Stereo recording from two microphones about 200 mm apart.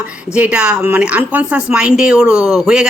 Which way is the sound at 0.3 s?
5° right (ahead or behind).